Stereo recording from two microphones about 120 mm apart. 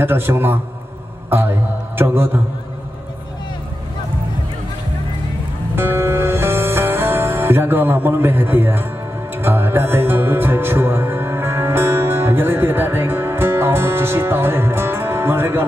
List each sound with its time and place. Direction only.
0.0 s a man's voice: 20° right (ahead or behind)
2.0 s a man's voice: 20° right (ahead or behind)
5.8 s music: 20° right (ahead or behind)